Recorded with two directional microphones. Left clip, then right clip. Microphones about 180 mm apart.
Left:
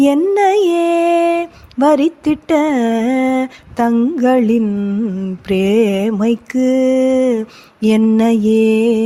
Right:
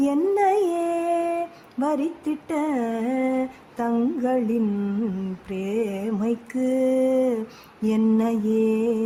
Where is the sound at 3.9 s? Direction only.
25° left (ahead or behind).